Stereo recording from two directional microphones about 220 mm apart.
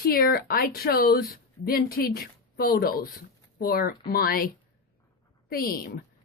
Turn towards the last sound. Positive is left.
turn(degrees=40)  # may be behind; listen again after turning